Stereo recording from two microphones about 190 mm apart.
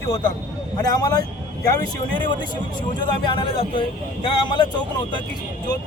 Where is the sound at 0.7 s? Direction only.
20° left (ahead or behind).